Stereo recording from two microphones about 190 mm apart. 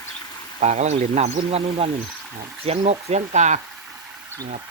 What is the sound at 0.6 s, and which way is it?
Speech, 35° right (ahead or behind).